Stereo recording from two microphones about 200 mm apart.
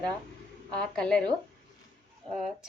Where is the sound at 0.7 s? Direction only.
5° left (ahead or behind).